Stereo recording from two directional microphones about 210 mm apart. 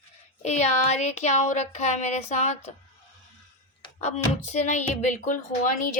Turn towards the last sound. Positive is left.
turn(degrees=40)  # may be behind; listen again after turning